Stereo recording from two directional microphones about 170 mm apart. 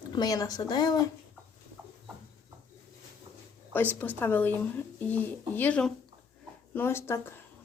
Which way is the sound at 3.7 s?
10° left (ahead or behind).